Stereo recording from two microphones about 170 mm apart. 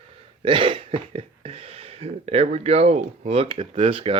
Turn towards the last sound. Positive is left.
turn(degrees=-30)  # may be behind; listen again after turning